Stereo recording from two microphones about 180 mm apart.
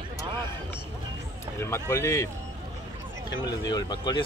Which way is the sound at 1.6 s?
15° left (ahead or behind).